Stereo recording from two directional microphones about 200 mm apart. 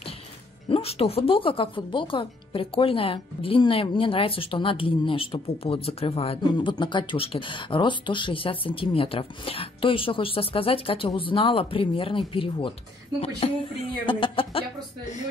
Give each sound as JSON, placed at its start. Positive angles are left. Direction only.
{"t": 0.7, "sound": "speech", "side_deg": 30}